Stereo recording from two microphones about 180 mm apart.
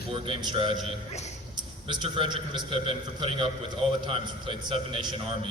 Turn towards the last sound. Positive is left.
turn(degrees=-30)  # may be behind; listen again after turning